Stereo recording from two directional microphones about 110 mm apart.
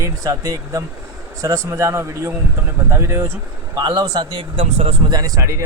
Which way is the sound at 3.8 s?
40° right (ahead or behind).